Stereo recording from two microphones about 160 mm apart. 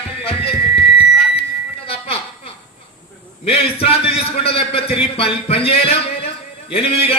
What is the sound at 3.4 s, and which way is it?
A man's voice, 35° left (ahead or behind).